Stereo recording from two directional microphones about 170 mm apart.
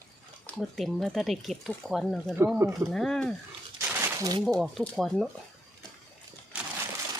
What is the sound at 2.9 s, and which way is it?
Speech, centre (ahead or behind).